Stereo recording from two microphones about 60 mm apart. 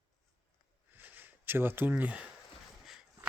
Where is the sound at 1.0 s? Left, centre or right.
Right.